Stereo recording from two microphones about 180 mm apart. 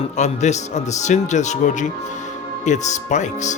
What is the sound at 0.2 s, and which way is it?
Speech, 40° left (ahead or behind).